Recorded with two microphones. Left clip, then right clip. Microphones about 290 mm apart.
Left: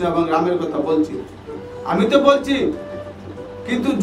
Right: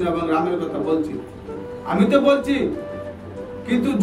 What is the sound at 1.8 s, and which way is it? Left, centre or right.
Speech, centre.